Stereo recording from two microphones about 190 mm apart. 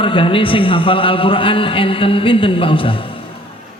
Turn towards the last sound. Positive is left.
turn(degrees=25)  # may be behind; listen again after turning